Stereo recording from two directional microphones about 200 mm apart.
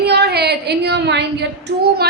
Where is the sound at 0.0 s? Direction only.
55° right (ahead or behind).